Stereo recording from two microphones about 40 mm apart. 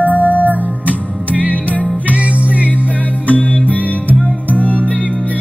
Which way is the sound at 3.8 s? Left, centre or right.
Right.